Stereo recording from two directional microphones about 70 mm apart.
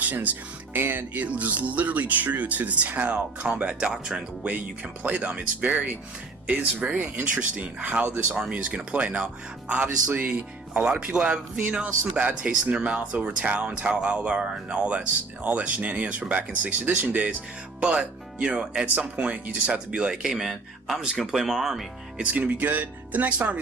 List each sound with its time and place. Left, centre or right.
0.0 s speech: right; by 4.2 s centre
4.4 s speech: right; by 21.8 s centre
22.2 s speech: centre